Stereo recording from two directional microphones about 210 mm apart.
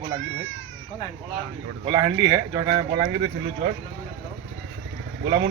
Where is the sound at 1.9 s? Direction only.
20° right (ahead or behind).